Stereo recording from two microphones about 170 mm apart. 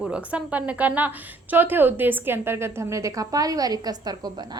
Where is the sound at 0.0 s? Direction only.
5° right (ahead or behind).